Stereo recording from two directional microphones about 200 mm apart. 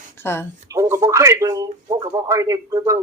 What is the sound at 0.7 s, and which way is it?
Speech, 15° right (ahead or behind).